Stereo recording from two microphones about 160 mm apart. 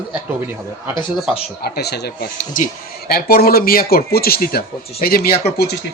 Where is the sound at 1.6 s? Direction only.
90° left.